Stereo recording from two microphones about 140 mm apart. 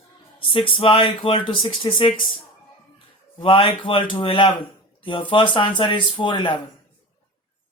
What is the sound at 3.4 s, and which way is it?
Speech, 40° left (ahead or behind).